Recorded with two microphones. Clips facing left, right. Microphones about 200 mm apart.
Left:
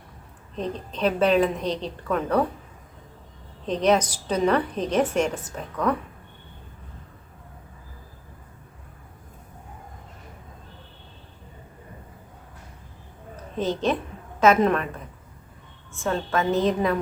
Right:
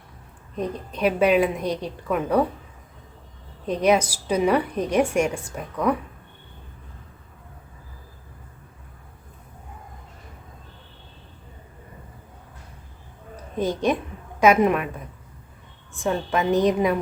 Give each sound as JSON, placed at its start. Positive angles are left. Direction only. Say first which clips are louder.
{"t": 0.5, "sound": "a woman's voice", "louder": "right 2 dB", "side_deg": -10}
{"t": 3.7, "sound": "a woman's voice", "louder": "right 1 dB", "side_deg": -10}
{"t": 13.3, "sound": "a sound", "louder": "right 1 dB", "side_deg": -10}
{"t": 14.3, "sound": "a woman's voice", "louder": "right 1 dB", "side_deg": -10}